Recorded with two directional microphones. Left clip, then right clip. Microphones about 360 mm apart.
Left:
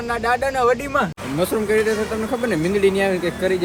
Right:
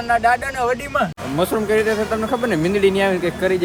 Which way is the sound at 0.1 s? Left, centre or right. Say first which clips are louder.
Right 3 dB; centre.